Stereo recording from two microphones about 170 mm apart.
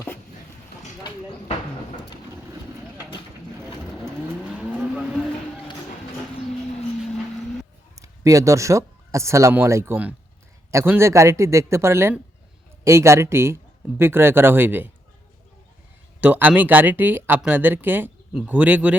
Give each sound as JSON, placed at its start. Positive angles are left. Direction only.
{"t": 4.0, "sound": "vehicle", "side_deg": -5}
{"t": 7.9, "sound": "speech", "side_deg": -20}
{"t": 16.2, "sound": "speech", "side_deg": -10}